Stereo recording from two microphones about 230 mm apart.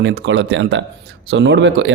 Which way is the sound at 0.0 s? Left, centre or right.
Right.